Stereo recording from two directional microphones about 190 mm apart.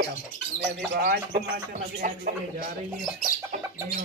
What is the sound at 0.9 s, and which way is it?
Speech, 55° right (ahead or behind).